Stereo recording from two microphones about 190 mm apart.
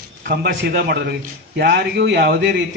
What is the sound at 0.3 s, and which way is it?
A man's voice, 55° right (ahead or behind).